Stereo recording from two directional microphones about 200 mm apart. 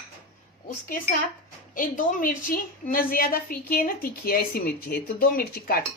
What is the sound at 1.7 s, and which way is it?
A woman's voice, 40° left (ahead or behind).